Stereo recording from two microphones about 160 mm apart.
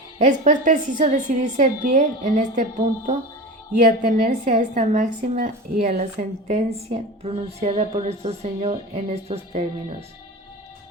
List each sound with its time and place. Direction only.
0.2 s a woman's voice: 55° right (ahead or behind)